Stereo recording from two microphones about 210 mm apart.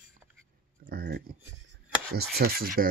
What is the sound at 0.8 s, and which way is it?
Speech, 45° right (ahead or behind).